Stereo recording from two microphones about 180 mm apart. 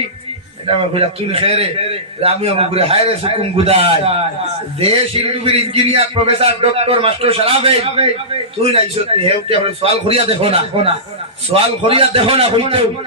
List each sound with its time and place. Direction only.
0.9 s a man's voice: 30° right (ahead or behind)